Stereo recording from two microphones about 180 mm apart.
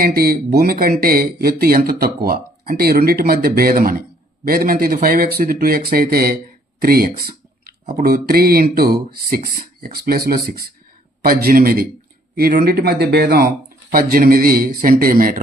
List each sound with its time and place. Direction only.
0.0 s a man's voice: 55° right (ahead or behind)